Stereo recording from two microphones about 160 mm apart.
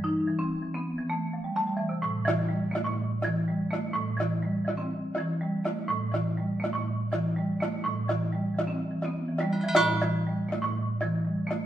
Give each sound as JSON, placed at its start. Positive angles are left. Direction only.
{"t": 9.5, "sound": "music", "side_deg": 0}